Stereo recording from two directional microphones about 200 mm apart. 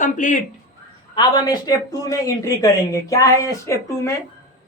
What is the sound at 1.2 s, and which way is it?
Speech, 20° left (ahead or behind).